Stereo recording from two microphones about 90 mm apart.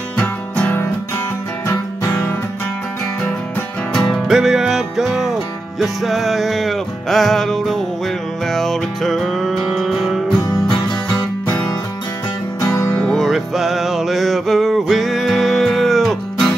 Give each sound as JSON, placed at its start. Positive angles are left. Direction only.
{"t": 0.2, "sound": "music", "side_deg": 15}
{"t": 1.7, "sound": "music", "side_deg": 35}
{"t": 3.9, "sound": "music", "side_deg": 5}
{"t": 4.3, "sound": "music", "side_deg": -5}
{"t": 12.5, "sound": "music", "side_deg": 35}
{"t": 13.0, "sound": "music", "side_deg": 5}